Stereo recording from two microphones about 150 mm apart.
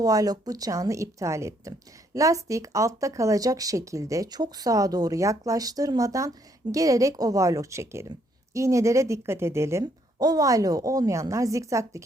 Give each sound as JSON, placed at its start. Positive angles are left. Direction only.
{"t": 0.0, "sound": "speech", "side_deg": -25}